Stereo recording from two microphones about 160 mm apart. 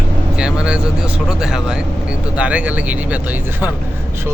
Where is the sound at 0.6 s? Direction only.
5° right (ahead or behind).